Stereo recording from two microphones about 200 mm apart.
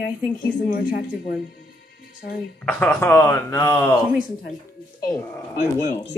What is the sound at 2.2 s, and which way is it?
Speech, 50° left (ahead or behind).